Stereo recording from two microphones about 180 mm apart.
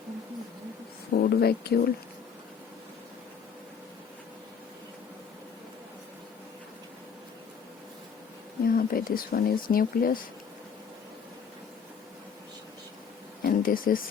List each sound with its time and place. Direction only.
1.1 s speech: 60° left (ahead or behind)
8.6 s speech: 55° left (ahead or behind)
13.4 s a sound: 55° left (ahead or behind)